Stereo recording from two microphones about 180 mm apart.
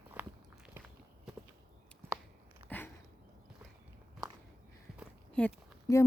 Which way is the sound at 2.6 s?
10° left (ahead or behind).